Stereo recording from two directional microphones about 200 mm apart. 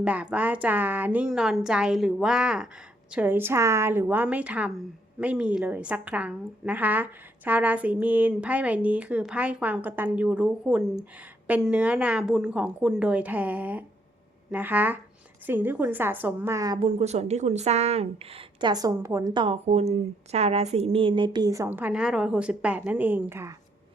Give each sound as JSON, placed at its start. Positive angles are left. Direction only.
{"t": 0.0, "sound": "a woman's voice", "side_deg": -5}
{"t": 17.0, "sound": "a woman's voice", "side_deg": -35}